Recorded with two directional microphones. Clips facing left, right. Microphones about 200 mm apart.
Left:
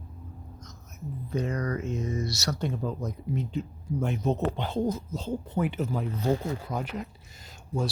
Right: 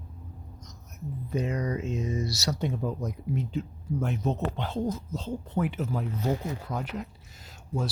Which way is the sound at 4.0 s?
Centre (ahead or behind).